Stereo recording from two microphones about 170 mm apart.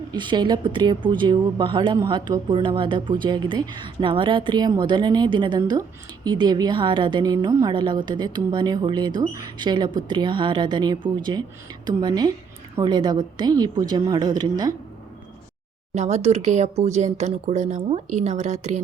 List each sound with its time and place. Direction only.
0.1 s speech: 25° right (ahead or behind)
16.0 s speech: 40° right (ahead or behind)